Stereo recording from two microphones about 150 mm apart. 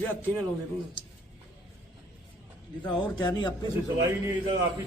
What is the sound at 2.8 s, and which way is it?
Speech, 30° left (ahead or behind).